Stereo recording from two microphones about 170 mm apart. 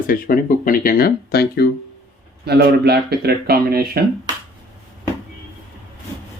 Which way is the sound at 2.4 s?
75° right (ahead or behind).